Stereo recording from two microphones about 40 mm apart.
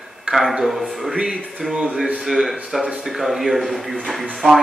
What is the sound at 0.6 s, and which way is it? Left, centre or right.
Speech, centre.